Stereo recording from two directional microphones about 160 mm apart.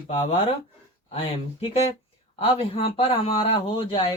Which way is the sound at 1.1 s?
40° left (ahead or behind).